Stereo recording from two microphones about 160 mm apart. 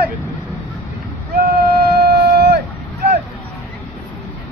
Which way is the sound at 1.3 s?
75° right (ahead or behind).